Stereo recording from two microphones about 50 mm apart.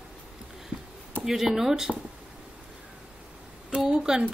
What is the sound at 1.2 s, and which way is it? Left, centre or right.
Speech, centre.